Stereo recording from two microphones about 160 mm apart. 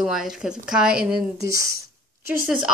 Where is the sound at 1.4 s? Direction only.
20° right (ahead or behind).